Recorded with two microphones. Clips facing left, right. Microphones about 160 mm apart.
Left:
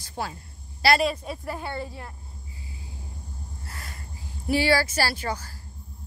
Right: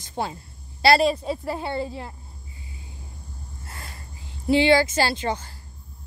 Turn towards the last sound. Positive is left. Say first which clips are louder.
# right 4 dB
turn(degrees=-25)  # may be behind; listen again after turning